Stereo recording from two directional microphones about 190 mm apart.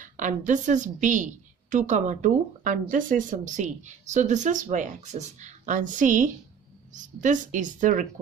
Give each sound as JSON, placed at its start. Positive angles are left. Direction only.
{"t": 0.0, "sound": "a woman's voice", "side_deg": -40}